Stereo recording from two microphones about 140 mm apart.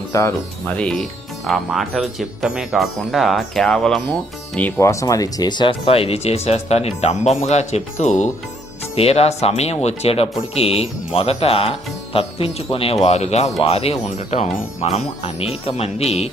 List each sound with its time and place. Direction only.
0.1 s speech: 20° left (ahead or behind)
0.7 s speech: 5° left (ahead or behind)
4.8 s speech: 20° left (ahead or behind); by 8.3 s 60° left (ahead or behind)
9.0 s speech: 45° left (ahead or behind)